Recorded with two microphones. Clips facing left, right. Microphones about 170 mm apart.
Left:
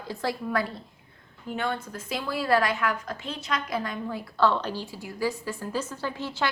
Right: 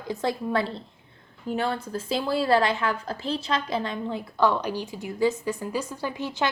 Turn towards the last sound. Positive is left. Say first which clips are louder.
# right 2 dB
turn(degrees=-15)  # may be behind; listen again after turning